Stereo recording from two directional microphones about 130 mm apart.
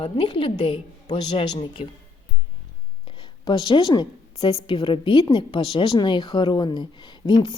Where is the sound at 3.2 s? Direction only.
35° left (ahead or behind).